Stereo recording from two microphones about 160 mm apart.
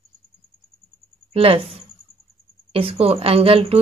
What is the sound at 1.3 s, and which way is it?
Speech, 35° right (ahead or behind).